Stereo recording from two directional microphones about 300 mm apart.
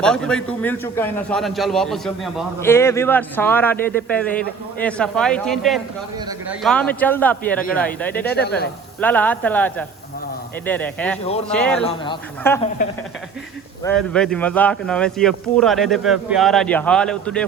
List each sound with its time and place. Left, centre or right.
0.0 s a man's voice: centre
8.3 s speech: left
9.0 s a man's voice: centre
13.8 s a man's voice: centre